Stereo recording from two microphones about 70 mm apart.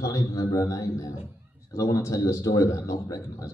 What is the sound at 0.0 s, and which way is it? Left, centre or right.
A man's voice, left.